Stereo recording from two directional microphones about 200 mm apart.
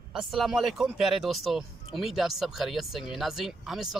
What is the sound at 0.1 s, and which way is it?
Speech, centre (ahead or behind).